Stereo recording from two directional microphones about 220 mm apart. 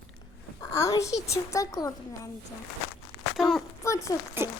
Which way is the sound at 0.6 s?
15° left (ahead or behind).